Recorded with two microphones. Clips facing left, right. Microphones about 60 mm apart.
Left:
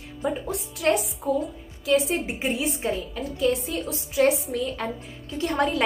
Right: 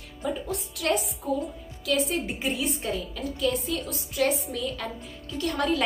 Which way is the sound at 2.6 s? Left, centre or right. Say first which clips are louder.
Left 3 dB; left.